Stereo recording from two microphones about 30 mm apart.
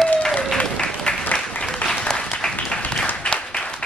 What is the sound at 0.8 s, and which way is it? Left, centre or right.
Applause, left.